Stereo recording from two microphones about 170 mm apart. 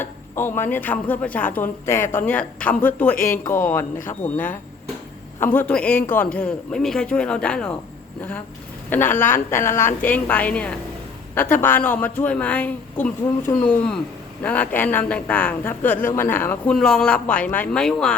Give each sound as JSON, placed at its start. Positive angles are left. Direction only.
{"t": 0.0, "sound": "speech", "side_deg": 15}
{"t": 4.2, "sound": "speech", "side_deg": 50}
{"t": 5.4, "sound": "speech", "side_deg": 10}
{"t": 8.9, "sound": "speech", "side_deg": 10}